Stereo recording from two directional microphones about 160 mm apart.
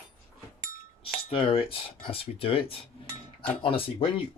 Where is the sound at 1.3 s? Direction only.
35° left (ahead or behind).